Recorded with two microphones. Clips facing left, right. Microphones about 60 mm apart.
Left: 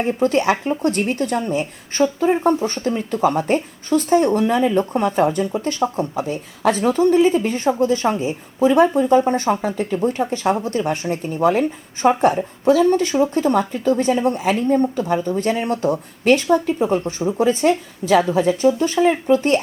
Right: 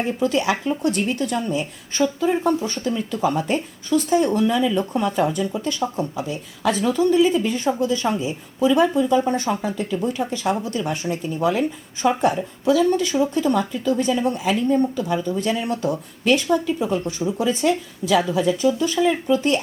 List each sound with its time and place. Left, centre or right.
0.2 s a woman's voice: left